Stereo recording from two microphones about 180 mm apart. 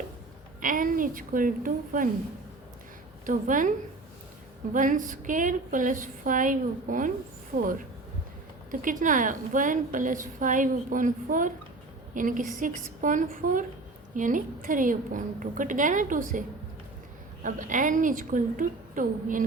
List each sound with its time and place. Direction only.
0.6 s a woman's voice: 50° right (ahead or behind)
3.2 s a woman's voice: 45° right (ahead or behind)
4.7 s a woman's voice: 45° right (ahead or behind)
8.7 s a woman's voice: 50° right (ahead or behind)
17.4 s a woman's voice: 45° right (ahead or behind)